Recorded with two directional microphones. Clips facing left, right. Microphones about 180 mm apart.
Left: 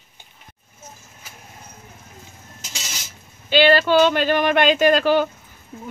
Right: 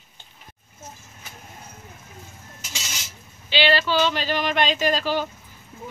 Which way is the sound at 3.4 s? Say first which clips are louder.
Left 6 dB; 50° left (ahead or behind).